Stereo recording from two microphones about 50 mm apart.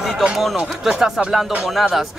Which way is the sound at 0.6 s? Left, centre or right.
Centre.